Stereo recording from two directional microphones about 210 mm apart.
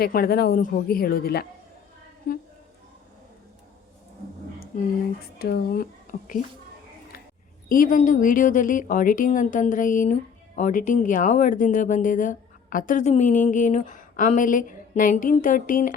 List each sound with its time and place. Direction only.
0.0 s a woman's voice: 45° left (ahead or behind)
4.7 s a woman's voice: 40° left (ahead or behind)
7.7 s a woman's voice: 40° left (ahead or behind)